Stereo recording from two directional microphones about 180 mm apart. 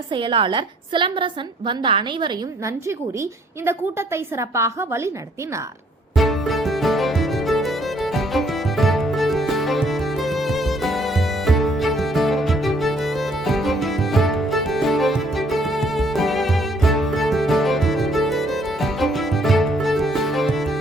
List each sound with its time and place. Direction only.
0.1 s a woman's voice: 30° right (ahead or behind)
3.7 s a woman's voice: 15° right (ahead or behind)
6.1 s music: centre (ahead or behind)